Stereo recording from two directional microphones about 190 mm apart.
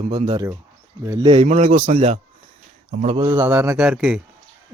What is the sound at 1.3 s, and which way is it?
A man's voice, 35° right (ahead or behind).